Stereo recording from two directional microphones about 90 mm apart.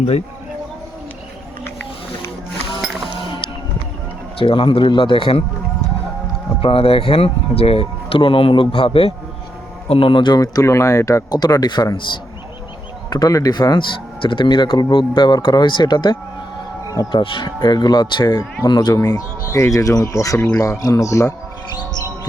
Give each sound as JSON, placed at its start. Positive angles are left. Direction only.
{"t": 4.4, "sound": "a man's voice", "side_deg": 70}
{"t": 6.6, "sound": "a man's voice", "side_deg": 90}
{"t": 10.3, "sound": "speech", "side_deg": 45}
{"t": 11.3, "sound": "speech", "side_deg": 45}
{"t": 13.1, "sound": "speech", "side_deg": 40}
{"t": 14.2, "sound": "speech", "side_deg": 65}
{"t": 18.9, "sound": "speech", "side_deg": 40}